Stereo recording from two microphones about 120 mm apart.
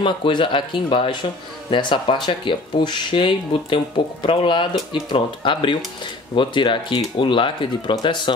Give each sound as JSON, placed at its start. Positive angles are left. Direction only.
{"t": 0.0, "sound": "speech", "side_deg": 45}